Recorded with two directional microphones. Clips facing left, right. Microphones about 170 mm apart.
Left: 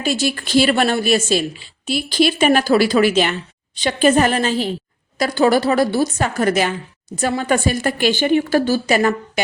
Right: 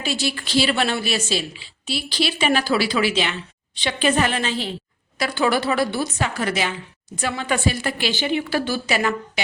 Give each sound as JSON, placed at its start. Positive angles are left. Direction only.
{"t": 0.0, "sound": "a woman's voice", "side_deg": 45}